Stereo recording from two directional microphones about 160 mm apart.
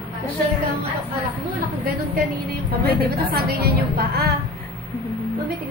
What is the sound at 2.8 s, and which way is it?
A woman's voice, 75° right (ahead or behind).